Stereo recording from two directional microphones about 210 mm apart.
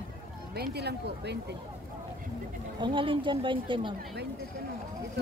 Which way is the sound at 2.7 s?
20° right (ahead or behind).